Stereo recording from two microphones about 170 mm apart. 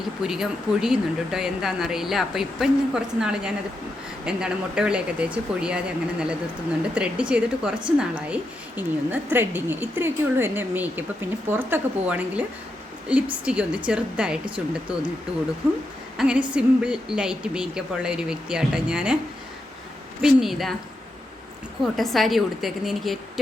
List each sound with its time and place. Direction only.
0.2 s a woman's voice: 5° right (ahead or behind)
16.1 s speech: 5° right (ahead or behind)
20.2 s speech: centre (ahead or behind)
21.9 s speech: centre (ahead or behind)